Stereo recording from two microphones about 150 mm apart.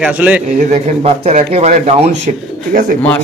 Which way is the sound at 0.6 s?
55° right (ahead or behind).